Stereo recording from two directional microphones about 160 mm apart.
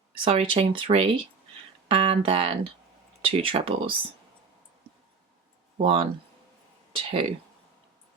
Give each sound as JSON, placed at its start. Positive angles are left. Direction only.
{"t": 0.1, "sound": "speech", "side_deg": -35}
{"t": 5.7, "sound": "speech", "side_deg": -35}